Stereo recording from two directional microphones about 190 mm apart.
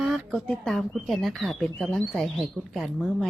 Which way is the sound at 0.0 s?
Centre (ahead or behind).